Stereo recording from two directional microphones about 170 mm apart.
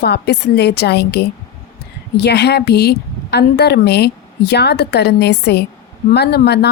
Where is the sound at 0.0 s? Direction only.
75° left (ahead or behind).